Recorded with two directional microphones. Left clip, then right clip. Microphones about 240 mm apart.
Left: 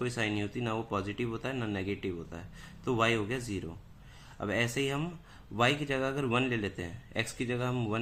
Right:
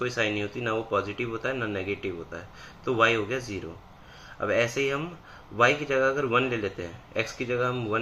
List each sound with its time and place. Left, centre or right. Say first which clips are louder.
0.0 s speech: right 6 dB; centre